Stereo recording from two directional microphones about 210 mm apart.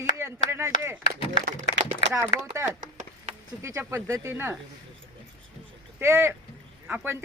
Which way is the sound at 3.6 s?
15° right (ahead or behind).